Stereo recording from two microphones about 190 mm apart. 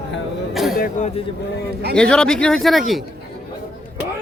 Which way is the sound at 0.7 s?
50° left (ahead or behind).